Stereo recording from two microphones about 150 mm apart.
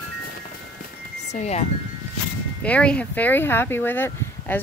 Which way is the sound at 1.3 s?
45° left (ahead or behind).